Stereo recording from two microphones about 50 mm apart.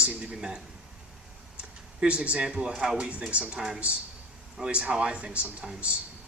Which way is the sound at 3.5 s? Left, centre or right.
Centre.